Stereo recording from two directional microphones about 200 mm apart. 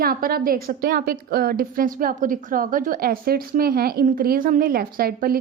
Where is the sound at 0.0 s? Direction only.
45° right (ahead or behind).